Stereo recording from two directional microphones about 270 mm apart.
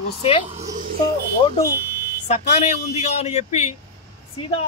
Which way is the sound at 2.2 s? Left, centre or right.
Left.